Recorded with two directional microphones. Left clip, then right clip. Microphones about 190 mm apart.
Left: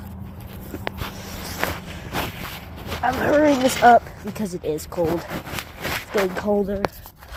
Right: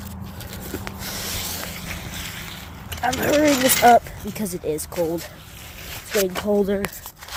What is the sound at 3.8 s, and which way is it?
Speech, 25° right (ahead or behind).